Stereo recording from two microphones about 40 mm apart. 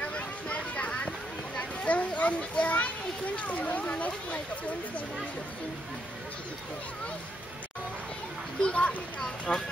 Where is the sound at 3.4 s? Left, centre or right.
Left.